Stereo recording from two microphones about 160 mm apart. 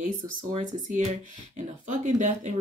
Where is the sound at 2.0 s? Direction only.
50° right (ahead or behind).